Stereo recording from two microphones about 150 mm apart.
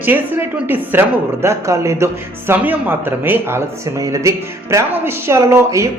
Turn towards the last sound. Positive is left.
turn(degrees=-20)  # may be behind; listen again after turning